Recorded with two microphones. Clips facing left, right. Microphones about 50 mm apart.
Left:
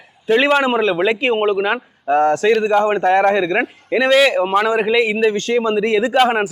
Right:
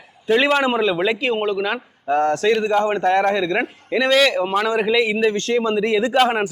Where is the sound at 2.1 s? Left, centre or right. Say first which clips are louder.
Left 3 dB; centre.